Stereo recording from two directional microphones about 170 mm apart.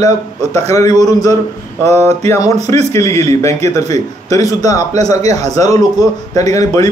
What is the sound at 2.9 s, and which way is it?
A man's voice, 20° left (ahead or behind).